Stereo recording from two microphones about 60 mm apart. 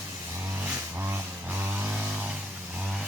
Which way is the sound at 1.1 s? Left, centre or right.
Right.